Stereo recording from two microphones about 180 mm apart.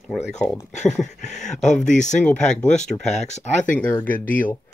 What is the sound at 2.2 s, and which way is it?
Speech, 5° left (ahead or behind).